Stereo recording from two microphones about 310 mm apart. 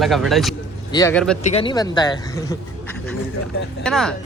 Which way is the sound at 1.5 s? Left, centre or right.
Centre.